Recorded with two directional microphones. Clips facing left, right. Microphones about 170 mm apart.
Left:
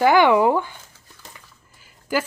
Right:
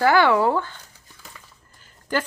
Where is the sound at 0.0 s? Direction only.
15° left (ahead or behind).